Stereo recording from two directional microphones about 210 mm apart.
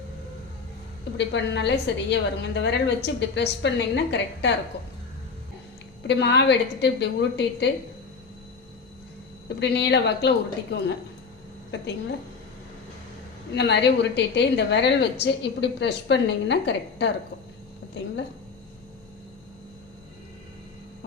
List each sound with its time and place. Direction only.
1.1 s a woman's voice: 55° left (ahead or behind)
6.0 s a woman's voice: 55° left (ahead or behind)
9.5 s a woman's voice: 55° left (ahead or behind)
13.5 s a woman's voice: 55° left (ahead or behind)